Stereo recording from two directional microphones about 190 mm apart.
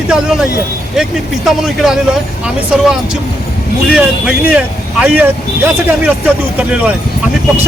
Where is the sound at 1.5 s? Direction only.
Centre (ahead or behind).